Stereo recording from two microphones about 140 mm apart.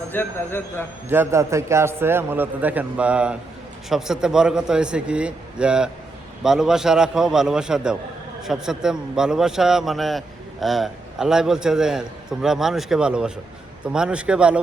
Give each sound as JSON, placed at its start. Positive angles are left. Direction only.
{"t": 0.1, "sound": "a man's voice", "side_deg": 15}
{"t": 1.1, "sound": "a man's voice", "side_deg": -20}